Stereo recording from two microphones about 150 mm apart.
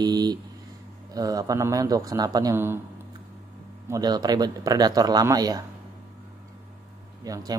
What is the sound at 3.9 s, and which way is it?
Speech, 25° right (ahead or behind).